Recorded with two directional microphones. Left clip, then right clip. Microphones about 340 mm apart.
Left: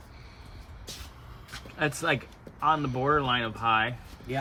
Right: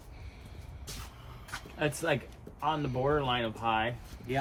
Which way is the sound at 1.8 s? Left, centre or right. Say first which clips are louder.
Left 3 dB; centre.